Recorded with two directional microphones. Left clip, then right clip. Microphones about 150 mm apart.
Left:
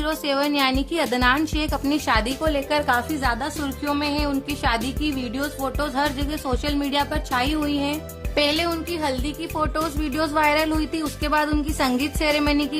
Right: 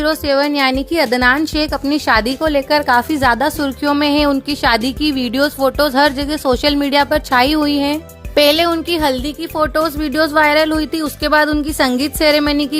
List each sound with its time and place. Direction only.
0.0 s a woman's voice: 30° right (ahead or behind)